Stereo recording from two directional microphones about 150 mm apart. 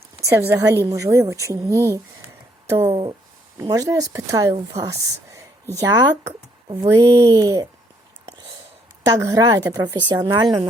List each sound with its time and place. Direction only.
0.2 s speech: 20° right (ahead or behind)
9.0 s a woman's voice: 25° right (ahead or behind)